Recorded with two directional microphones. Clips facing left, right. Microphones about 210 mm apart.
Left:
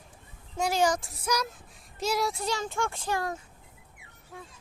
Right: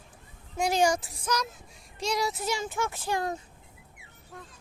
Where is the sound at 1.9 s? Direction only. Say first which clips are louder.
Left 1 dB; 5° left (ahead or behind).